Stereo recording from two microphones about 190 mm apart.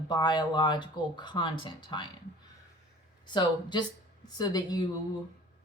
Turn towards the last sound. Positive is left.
turn(degrees=20)  # may be behind; listen again after turning